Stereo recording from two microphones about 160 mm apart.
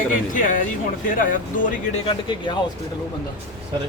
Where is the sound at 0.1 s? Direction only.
55° left (ahead or behind).